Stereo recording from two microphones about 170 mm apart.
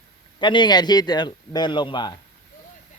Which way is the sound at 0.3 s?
30° left (ahead or behind).